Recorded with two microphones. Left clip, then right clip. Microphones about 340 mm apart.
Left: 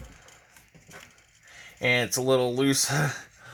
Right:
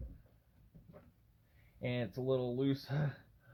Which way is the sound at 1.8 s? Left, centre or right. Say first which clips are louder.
Left 15 dB; left.